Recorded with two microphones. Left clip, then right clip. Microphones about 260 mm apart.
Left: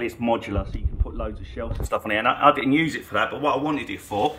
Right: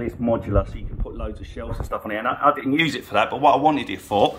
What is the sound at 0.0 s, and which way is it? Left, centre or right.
Speech, centre.